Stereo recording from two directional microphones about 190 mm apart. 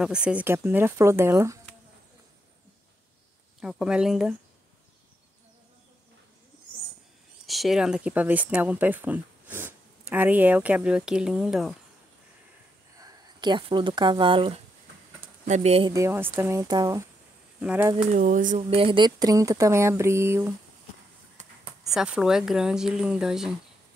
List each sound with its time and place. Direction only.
0.0 s speech: 5° right (ahead or behind)
3.6 s speech: 5° right (ahead or behind)
7.4 s speech: centre (ahead or behind)
13.0 s speech: 20° right (ahead or behind)
15.9 s speech: 15° right (ahead or behind)
17.6 s speech: 10° right (ahead or behind)
18.1 s speech: 45° right (ahead or behind)
18.8 s speech: 25° right (ahead or behind)
21.8 s speech: 5° right (ahead or behind)